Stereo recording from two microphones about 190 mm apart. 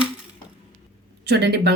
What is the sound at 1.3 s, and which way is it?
Speech, 60° right (ahead or behind).